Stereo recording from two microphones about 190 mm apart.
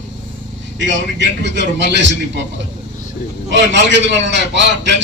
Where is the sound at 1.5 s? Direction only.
65° right (ahead or behind).